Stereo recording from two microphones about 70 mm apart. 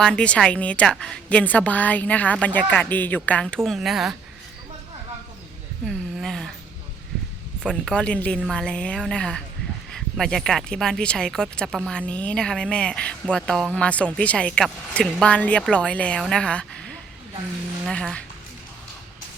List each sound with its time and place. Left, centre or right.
0.0 s a woman's voice: centre
3.4 s speech: centre
6.2 s a sound: centre
7.6 s speech: centre